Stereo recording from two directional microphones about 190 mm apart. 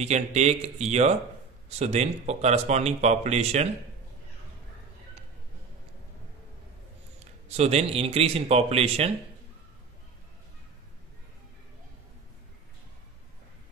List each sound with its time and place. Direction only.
0.0 s speech: 35° right (ahead or behind)
7.5 s speech: 35° right (ahead or behind)